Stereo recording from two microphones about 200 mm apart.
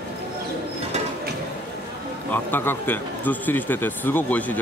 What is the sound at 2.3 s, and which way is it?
Speech, 10° left (ahead or behind).